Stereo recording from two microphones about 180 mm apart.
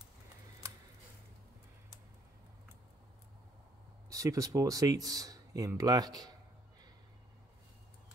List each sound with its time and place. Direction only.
4.1 s speech: 20° right (ahead or behind)